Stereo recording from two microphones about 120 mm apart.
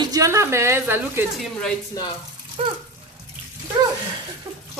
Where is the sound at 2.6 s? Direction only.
50° right (ahead or behind).